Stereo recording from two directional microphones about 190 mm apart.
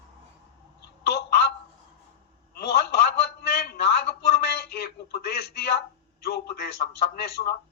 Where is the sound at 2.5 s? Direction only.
55° left (ahead or behind).